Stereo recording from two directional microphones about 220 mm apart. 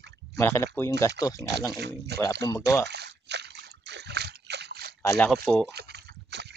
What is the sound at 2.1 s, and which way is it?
Speech, 50° right (ahead or behind).